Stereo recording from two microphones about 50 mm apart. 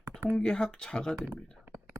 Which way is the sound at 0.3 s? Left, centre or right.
Centre.